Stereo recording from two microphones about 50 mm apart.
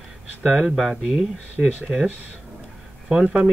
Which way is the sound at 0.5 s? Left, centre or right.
Centre.